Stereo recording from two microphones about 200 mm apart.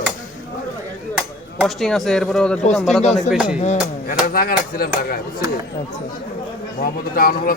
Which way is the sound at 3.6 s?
35° left (ahead or behind).